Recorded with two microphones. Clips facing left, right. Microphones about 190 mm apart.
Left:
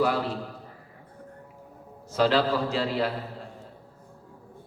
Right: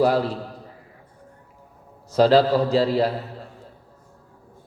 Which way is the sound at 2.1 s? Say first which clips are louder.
Right 7 dB; 35° right (ahead or behind).